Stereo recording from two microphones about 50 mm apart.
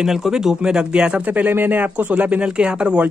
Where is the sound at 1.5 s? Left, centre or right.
Right.